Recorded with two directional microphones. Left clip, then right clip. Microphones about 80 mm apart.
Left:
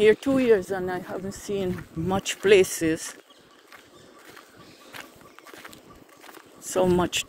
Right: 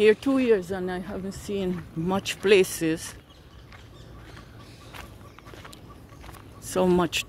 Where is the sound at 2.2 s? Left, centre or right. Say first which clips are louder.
Left 2 dB; centre.